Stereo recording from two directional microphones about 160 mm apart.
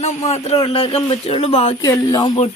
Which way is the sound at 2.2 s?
40° left (ahead or behind).